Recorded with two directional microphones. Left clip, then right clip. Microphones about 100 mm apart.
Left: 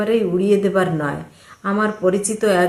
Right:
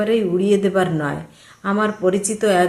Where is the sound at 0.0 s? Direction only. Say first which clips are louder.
Even; 25° right (ahead or behind).